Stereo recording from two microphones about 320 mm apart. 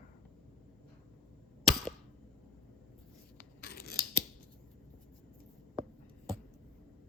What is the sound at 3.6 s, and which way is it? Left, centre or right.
Scissors, left.